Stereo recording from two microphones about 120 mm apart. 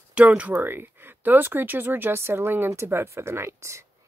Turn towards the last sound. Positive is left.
turn(degrees=-25)  # may be behind; listen again after turning